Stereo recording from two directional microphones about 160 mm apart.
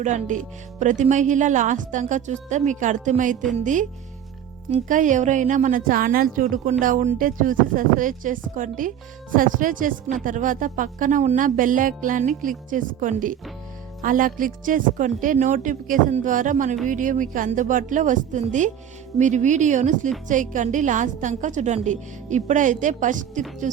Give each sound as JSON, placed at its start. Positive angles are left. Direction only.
{"t": 0.0, "sound": "a woman's voice", "side_deg": -50}